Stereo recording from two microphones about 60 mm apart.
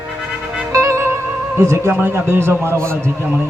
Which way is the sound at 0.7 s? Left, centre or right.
Right.